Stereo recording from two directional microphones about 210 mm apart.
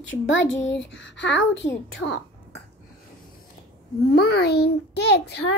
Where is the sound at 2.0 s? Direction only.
60° left (ahead or behind).